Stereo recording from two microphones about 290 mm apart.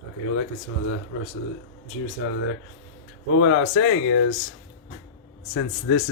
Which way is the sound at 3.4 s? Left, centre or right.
Left.